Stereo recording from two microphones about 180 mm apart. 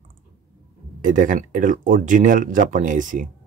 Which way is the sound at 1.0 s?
45° right (ahead or behind).